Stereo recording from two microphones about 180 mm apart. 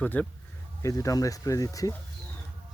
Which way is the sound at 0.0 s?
10° left (ahead or behind).